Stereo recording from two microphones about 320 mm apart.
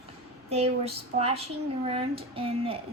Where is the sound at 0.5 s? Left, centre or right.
Centre.